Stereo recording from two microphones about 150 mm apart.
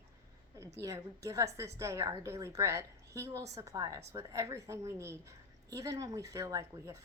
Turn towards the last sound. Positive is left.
turn(degrees=-20)  # may be behind; listen again after turning